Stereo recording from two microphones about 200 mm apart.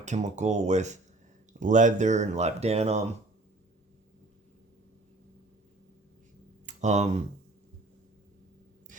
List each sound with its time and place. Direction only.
0.0 s speech: 35° right (ahead or behind)
6.7 s speech: 35° right (ahead or behind)